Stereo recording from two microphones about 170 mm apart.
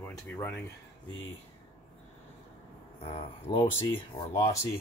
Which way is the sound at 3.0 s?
35° left (ahead or behind).